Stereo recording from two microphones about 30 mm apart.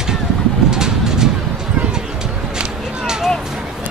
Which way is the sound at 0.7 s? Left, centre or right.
Right.